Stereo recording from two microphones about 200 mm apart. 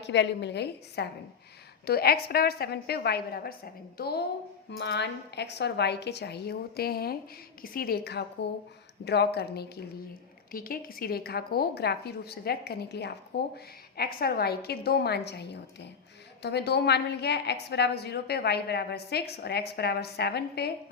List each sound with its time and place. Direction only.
0.0 s a woman's voice: 60° left (ahead or behind)